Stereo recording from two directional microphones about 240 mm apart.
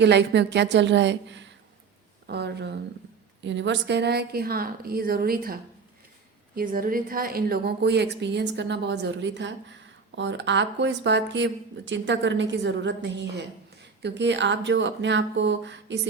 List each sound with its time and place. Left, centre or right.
0.0 s a woman's voice: right
6.6 s speech: right